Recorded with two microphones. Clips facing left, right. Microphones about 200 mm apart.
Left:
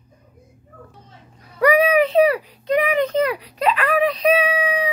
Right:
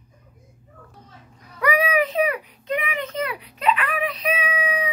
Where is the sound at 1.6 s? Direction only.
30° left (ahead or behind).